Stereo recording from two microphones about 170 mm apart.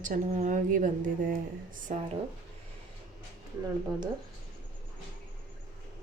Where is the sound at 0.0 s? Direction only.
50° right (ahead or behind).